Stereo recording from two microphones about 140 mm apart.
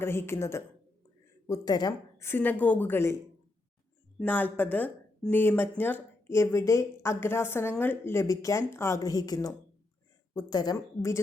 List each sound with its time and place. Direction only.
0.0 s speech: 20° left (ahead or behind)
2.2 s speech: 15° left (ahead or behind)
4.2 s speech: 15° left (ahead or behind)